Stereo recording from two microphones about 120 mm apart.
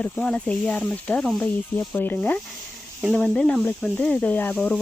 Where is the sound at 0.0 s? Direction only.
15° left (ahead or behind).